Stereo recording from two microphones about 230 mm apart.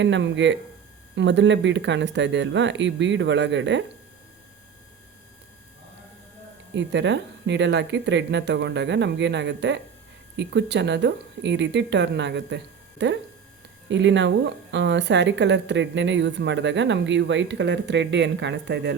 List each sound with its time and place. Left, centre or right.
0.0 s a woman's voice: right
6.7 s a woman's voice: right